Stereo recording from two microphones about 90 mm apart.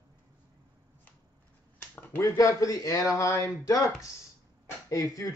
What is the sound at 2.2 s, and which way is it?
Speech, 35° left (ahead or behind).